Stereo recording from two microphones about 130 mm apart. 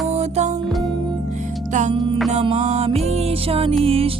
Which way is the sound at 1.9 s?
40° right (ahead or behind).